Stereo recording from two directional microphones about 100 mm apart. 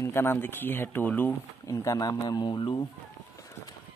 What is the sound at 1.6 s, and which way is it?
Speech, 35° left (ahead or behind).